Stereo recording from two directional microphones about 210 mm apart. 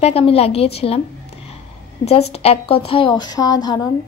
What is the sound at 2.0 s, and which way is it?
Speech, 30° left (ahead or behind).